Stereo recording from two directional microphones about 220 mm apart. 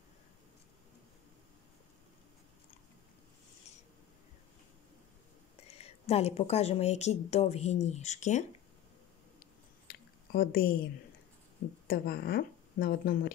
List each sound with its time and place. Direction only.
5.7 s speech: 30° left (ahead or behind)
9.8 s a sound: 40° left (ahead or behind)
11.9 s a woman's voice: 45° left (ahead or behind)